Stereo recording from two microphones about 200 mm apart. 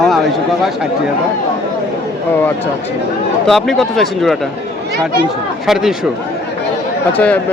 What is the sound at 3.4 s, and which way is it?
Speech, centre (ahead or behind).